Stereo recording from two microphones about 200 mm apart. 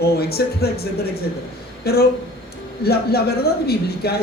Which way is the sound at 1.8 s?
50° left (ahead or behind).